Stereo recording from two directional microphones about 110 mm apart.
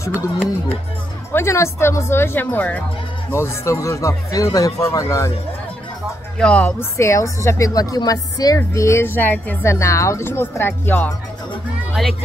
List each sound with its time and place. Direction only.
1.3 s a woman's voice: 25° left (ahead or behind)
6.3 s speech: 10° left (ahead or behind)
6.8 s a woman's voice: 25° left (ahead or behind)
11.9 s music: centre (ahead or behind)